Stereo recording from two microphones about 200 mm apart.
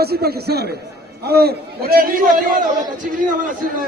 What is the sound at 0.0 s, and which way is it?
A man's voice, 50° right (ahead or behind).